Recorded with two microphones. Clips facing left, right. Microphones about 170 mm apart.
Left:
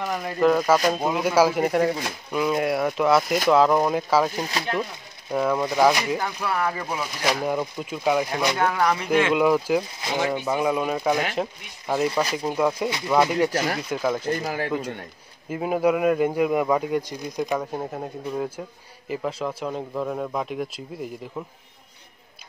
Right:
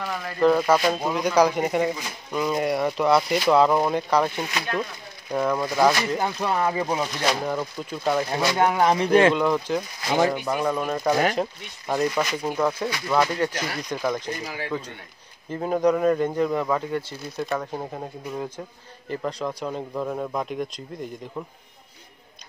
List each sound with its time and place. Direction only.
0.0 s speech: 20° left (ahead or behind)
0.4 s a man's voice: 5° left (ahead or behind)
4.4 s speech: 35° left (ahead or behind)
5.3 s a man's voice: 5° left (ahead or behind)
6.1 s speech: 20° right (ahead or behind)
7.2 s speech: 10° left (ahead or behind)
8.5 s speech: 20° right (ahead or behind)
9.3 s speech: 5° left (ahead or behind)
12.1 s speech: 35° left (ahead or behind)
12.4 s speech: 10° left (ahead or behind)
14.4 s speech: 45° left (ahead or behind)
15.5 s a man's voice: 10° left (ahead or behind)